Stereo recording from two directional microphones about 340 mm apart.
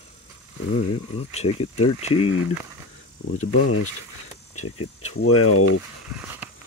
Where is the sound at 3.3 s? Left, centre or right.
Left.